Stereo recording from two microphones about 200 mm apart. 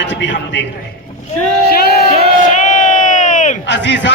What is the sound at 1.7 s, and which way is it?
Music, 50° left (ahead or behind).